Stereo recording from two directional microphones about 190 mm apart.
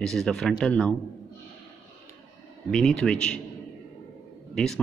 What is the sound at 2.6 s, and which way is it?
Speech, centre (ahead or behind).